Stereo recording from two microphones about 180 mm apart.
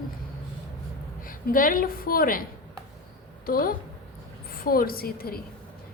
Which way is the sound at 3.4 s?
55° left (ahead or behind).